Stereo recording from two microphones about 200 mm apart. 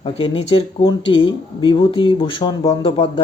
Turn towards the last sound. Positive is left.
turn(degrees=30)  # may be behind; listen again after turning